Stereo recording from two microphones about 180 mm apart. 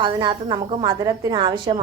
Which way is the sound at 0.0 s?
25° right (ahead or behind).